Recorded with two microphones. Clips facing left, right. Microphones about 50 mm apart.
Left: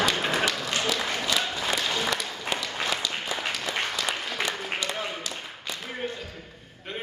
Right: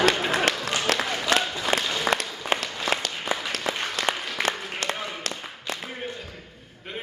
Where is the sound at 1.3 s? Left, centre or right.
Right.